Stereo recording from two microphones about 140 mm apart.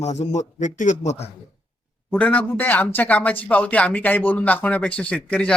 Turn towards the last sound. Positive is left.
turn(degrees=10)  # may be behind; listen again after turning